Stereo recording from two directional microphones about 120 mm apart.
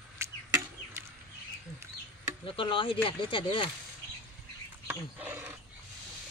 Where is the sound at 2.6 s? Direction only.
45° left (ahead or behind).